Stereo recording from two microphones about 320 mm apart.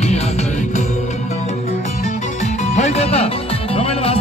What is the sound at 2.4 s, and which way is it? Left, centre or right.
Music, left.